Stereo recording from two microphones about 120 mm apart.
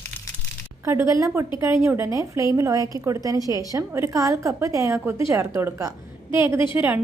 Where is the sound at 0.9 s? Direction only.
25° right (ahead or behind).